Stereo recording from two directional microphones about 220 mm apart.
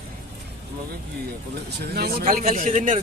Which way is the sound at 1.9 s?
45° right (ahead or behind).